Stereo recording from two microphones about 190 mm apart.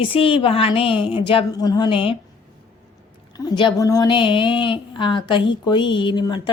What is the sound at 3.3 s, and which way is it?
A woman's voice, 20° left (ahead or behind).